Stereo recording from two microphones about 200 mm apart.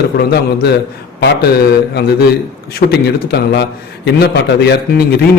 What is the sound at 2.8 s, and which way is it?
Speech, 45° left (ahead or behind).